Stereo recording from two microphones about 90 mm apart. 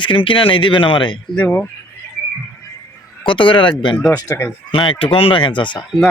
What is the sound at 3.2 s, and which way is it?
Speech, 70° left (ahead or behind).